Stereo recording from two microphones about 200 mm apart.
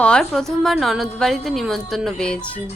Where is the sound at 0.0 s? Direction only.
5° left (ahead or behind).